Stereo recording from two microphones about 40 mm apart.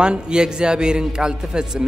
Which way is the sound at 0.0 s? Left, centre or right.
Right.